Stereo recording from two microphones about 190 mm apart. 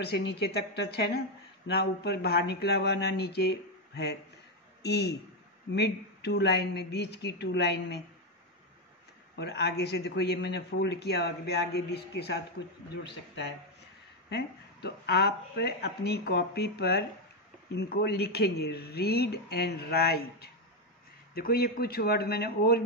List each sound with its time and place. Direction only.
0.0 s a man's voice: 60° left (ahead or behind)
9.4 s a man's voice: 60° left (ahead or behind)
14.3 s a man's voice: 60° left (ahead or behind)